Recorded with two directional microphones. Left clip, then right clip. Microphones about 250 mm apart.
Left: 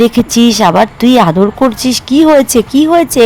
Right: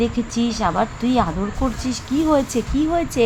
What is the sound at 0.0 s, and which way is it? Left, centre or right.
Speech, left.